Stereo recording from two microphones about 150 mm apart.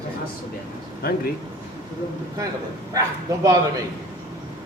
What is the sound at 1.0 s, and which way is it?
Speech, 80° left.